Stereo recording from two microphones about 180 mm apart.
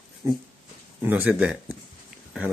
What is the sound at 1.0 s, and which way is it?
Speech, 10° right (ahead or behind).